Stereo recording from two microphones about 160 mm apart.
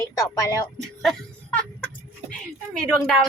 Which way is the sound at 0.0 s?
20° left (ahead or behind).